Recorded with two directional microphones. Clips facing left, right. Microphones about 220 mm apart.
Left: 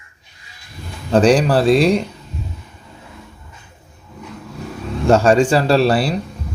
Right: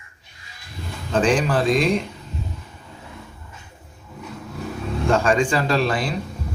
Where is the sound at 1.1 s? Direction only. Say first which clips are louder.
Left 6 dB; 35° left (ahead or behind).